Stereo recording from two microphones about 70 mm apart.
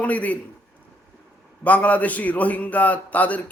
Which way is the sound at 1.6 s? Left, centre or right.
Left.